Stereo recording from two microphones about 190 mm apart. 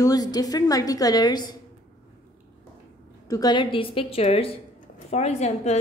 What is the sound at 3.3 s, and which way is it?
A woman's voice, 20° left (ahead or behind).